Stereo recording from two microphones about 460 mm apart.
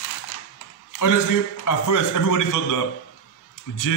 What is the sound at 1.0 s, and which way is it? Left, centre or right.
A man's voice, left.